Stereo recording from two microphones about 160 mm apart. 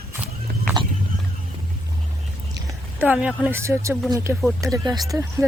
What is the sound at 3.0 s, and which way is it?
Speech, 10° right (ahead or behind).